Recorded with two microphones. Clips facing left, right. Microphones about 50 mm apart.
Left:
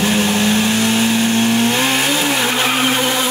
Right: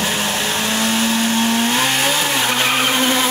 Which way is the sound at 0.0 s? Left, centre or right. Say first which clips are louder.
Left 5 dB; centre.